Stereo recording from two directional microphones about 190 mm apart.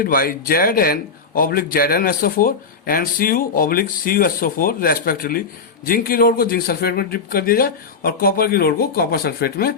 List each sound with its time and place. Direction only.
0.0 s speech: 50° left (ahead or behind)